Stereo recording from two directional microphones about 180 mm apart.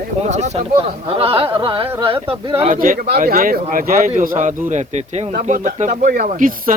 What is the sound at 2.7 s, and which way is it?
Speech, 50° right (ahead or behind).